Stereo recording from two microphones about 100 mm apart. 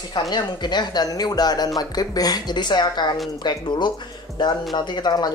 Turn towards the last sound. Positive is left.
turn(degrees=45)  # may be behind; listen again after turning